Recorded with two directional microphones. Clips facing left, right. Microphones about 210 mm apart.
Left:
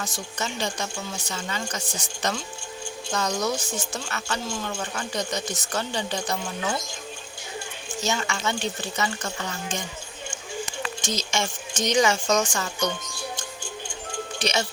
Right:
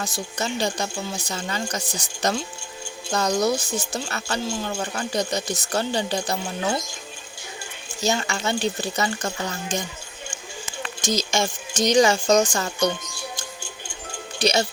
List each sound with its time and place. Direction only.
0.0 s speech: 35° right (ahead or behind)
8.0 s speech: 35° right (ahead or behind)
11.0 s speech: 40° right (ahead or behind)
14.3 s speech: 35° right (ahead or behind)